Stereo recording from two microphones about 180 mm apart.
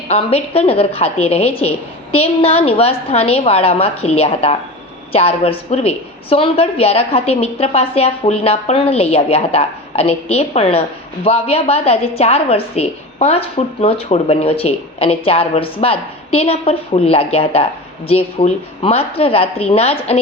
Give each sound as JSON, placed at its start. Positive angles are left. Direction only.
{"t": 0.1, "sound": "a woman's voice", "side_deg": 35}